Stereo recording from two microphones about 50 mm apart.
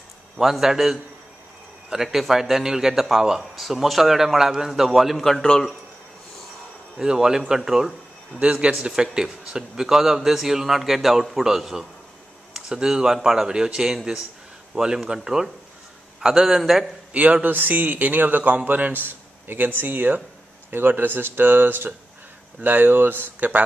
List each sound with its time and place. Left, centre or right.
0.4 s a man's voice: centre
7.0 s a man's voice: centre
8.4 s a man's voice: right; by 16.8 s centre
17.1 s a man's voice: right